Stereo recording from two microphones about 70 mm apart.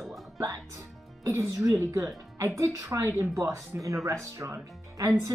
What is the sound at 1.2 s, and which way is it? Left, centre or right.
Speech, right.